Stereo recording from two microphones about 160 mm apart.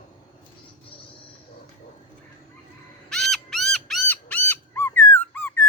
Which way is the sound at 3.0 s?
Centre (ahead or behind).